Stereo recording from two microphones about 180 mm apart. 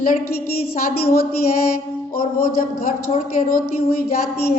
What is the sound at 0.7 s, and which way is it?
Music, 50° left (ahead or behind).